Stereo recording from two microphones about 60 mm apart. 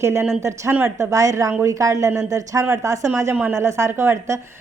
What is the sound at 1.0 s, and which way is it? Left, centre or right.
Speech, right.